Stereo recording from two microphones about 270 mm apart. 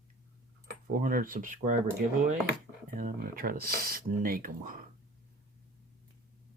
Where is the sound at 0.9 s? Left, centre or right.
Right.